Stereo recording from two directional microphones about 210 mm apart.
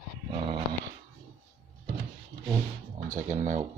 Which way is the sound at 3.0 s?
35° right (ahead or behind).